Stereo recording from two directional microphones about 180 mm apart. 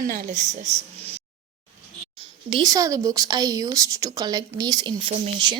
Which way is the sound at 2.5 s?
25° right (ahead or behind).